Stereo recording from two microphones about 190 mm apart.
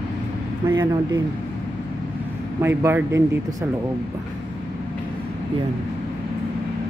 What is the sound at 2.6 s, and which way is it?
Speech, 15° right (ahead or behind).